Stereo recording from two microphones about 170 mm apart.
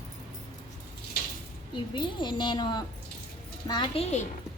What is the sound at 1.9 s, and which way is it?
A woman's voice, 25° left (ahead or behind).